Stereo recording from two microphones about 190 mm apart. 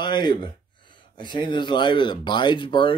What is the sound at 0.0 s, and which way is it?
Speech, 25° left (ahead or behind).